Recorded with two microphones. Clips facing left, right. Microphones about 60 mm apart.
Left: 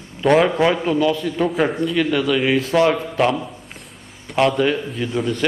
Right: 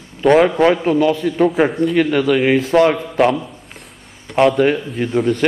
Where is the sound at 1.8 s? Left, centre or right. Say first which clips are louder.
Right 4 dB; right.